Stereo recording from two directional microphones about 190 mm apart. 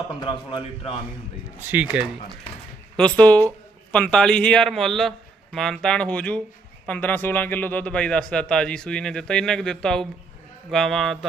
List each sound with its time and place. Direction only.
0.2 s a man's voice: 25° left (ahead or behind)
1.6 s speech: 10° right (ahead or behind)
3.0 s speech: 5° left (ahead or behind)